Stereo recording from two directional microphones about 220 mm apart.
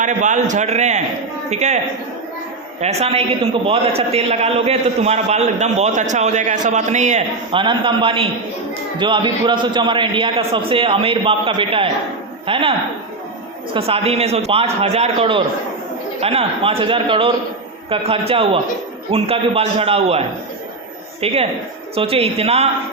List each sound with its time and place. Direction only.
0.0 s a man's voice: 35° right (ahead or behind)
2.8 s a man's voice: 30° right (ahead or behind)
13.7 s a man's voice: 25° right (ahead or behind)
21.9 s a man's voice: 25° right (ahead or behind)